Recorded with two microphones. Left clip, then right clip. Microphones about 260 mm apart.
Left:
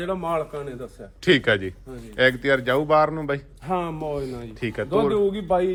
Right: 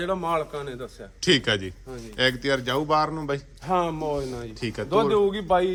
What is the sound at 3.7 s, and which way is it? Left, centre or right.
Speech, right.